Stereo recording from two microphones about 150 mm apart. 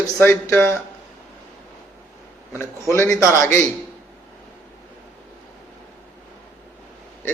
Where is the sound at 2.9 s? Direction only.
10° left (ahead or behind).